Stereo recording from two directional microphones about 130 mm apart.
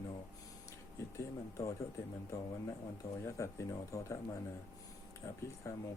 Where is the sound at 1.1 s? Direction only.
25° left (ahead or behind).